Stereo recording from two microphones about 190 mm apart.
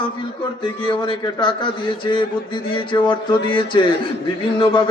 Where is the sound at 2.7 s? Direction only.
25° left (ahead or behind).